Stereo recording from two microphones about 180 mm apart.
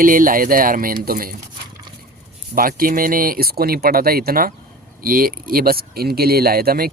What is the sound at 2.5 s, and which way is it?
Speech, 50° right (ahead or behind).